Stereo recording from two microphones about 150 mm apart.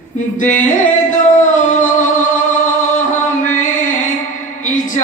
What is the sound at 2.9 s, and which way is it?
Music, 55° left (ahead or behind).